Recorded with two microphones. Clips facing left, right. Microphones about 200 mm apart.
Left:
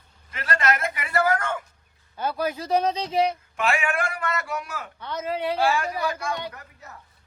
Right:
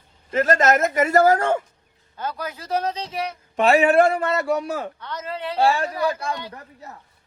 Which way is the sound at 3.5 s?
35° right (ahead or behind).